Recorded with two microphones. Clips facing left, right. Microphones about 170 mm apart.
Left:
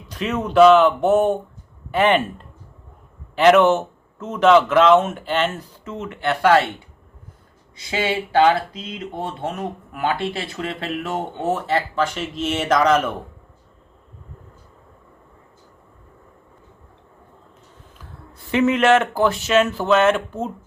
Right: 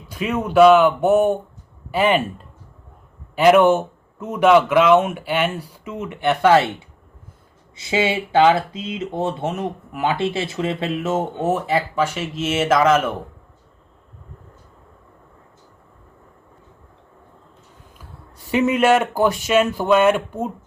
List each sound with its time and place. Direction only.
0.1 s speech: 10° right (ahead or behind)
3.3 s speech: 10° right (ahead or behind)
7.8 s speech: 25° right (ahead or behind); by 13.1 s 5° right (ahead or behind)
18.5 s speech: 15° right (ahead or behind)